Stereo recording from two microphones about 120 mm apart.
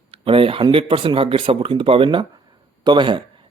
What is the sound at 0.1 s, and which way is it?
Speech, 50° right (ahead or behind).